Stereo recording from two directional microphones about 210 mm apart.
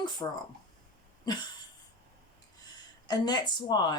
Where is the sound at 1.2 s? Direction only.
20° left (ahead or behind).